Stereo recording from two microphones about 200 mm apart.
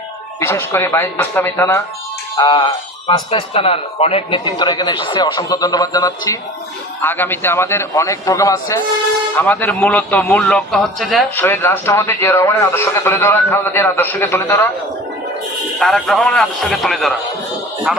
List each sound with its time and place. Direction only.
0.3 s a man's voice: 15° left (ahead or behind)
11.4 s a man's voice: 10° left (ahead or behind)
15.8 s a man's voice: centre (ahead or behind)